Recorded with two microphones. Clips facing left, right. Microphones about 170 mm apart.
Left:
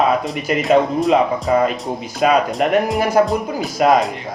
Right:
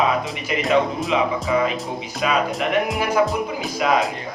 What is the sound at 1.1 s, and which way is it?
Music, 45° left (ahead or behind).